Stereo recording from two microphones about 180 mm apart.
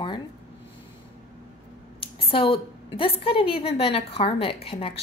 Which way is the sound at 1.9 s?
30° left (ahead or behind).